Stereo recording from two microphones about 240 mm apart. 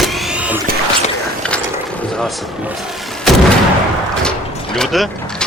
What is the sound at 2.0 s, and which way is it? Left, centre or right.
Speech, centre.